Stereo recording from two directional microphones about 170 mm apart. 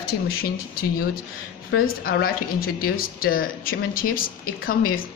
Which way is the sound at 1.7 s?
60° left (ahead or behind).